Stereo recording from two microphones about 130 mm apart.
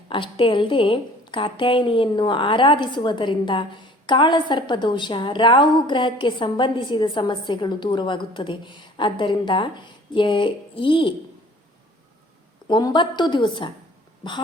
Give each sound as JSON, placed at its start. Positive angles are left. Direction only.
{"t": 0.1, "sound": "a woman's voice", "side_deg": 40}
{"t": 12.6, "sound": "a woman's voice", "side_deg": 35}